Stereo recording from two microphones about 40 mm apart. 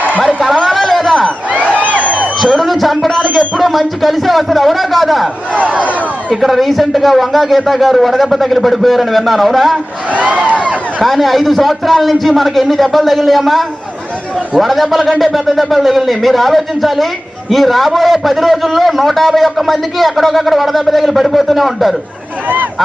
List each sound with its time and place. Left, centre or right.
0.7 s a sound: centre
1.8 s a sound: right
2.4 s music: centre
3.3 s a man's voice: centre
5.5 s speech: right
6.3 s a man's voice: centre
11.0 s a man's voice: centre